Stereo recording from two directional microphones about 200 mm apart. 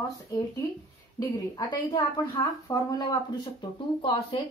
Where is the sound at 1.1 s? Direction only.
20° left (ahead or behind).